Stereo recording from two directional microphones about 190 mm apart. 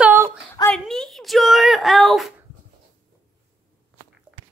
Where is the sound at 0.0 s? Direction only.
10° right (ahead or behind).